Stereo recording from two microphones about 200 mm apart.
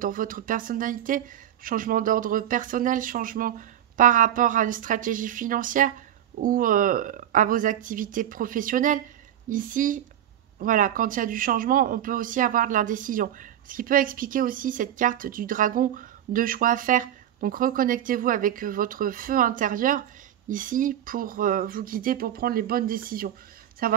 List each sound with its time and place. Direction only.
0.0 s speech: 45° right (ahead or behind)